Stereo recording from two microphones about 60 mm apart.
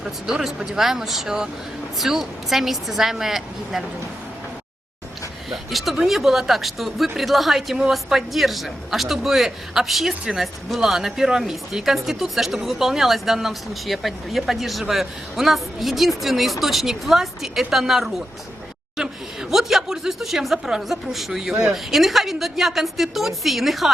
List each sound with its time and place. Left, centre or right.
0.0 s speech: centre
5.5 s speech: centre